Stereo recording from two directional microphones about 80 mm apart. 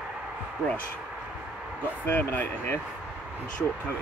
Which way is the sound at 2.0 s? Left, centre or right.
Left.